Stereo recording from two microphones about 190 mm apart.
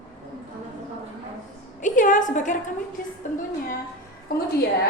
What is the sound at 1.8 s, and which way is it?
Speech, 45° left (ahead or behind).